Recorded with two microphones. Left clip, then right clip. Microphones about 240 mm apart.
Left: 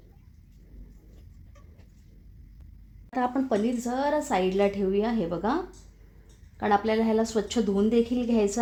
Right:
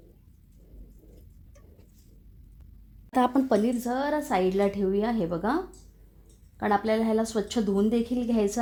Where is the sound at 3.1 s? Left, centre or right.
Right; by 5.6 s centre.